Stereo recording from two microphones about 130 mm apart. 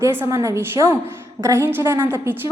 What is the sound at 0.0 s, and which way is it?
A woman's voice, 20° right (ahead or behind).